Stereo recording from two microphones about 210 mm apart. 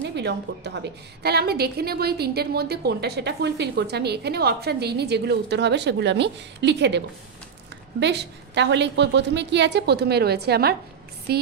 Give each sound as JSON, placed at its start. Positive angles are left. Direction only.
{"t": 0.0, "sound": "a woman's voice", "side_deg": -55}
{"t": 8.0, "sound": "a woman's voice", "side_deg": -55}